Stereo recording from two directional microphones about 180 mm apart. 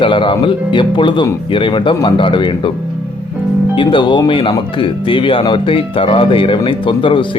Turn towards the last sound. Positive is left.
turn(degrees=30)  # may be behind; listen again after turning